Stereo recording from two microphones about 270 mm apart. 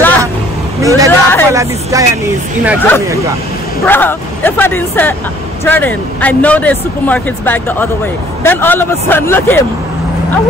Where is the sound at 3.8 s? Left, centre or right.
Centre.